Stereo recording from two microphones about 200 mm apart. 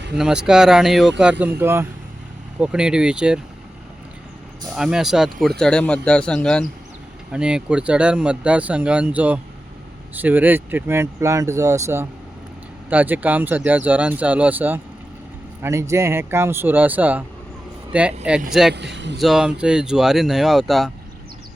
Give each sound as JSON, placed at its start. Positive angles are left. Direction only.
{"t": 0.2, "sound": "speech", "side_deg": -5}
{"t": 4.7, "sound": "speech", "side_deg": -5}
{"t": 18.7, "sound": "a man's voice", "side_deg": -60}
{"t": 19.2, "sound": "speech", "side_deg": -5}